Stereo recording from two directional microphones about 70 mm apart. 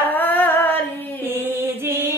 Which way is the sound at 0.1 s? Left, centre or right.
Left.